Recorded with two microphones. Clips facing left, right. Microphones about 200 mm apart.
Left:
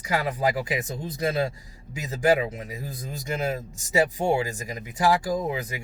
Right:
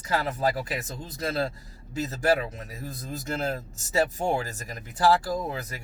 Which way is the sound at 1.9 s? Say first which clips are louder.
Left 2 dB; 15° left (ahead or behind).